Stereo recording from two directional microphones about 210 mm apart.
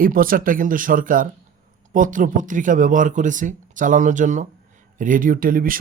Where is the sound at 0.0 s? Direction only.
40° right (ahead or behind).